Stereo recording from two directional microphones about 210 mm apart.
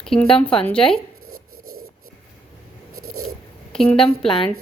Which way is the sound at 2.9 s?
90° right.